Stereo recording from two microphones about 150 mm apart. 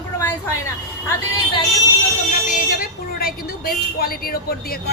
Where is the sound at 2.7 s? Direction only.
85° left.